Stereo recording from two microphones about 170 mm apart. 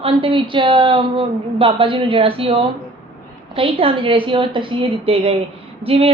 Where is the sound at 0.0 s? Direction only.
30° right (ahead or behind).